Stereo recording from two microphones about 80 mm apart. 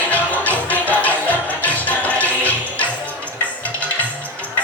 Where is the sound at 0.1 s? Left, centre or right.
Centre.